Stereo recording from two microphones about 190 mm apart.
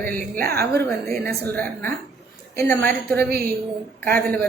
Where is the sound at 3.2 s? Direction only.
55° right (ahead or behind).